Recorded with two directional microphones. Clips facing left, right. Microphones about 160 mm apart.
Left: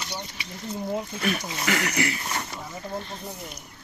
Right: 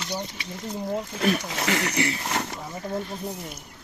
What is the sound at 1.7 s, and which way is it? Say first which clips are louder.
Speech: even; 30° right (ahead or behind).